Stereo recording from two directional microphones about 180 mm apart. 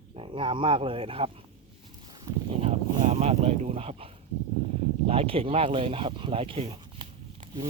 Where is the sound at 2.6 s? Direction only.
35° right (ahead or behind).